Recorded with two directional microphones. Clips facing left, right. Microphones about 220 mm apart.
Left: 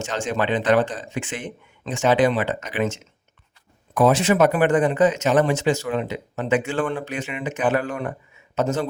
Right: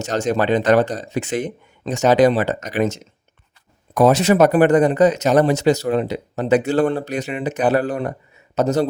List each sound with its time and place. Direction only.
0.0 s speech: 40° right (ahead or behind)